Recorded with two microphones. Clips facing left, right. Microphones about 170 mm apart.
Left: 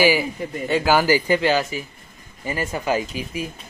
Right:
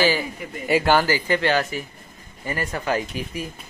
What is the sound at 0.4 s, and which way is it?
Speech, 30° left (ahead or behind).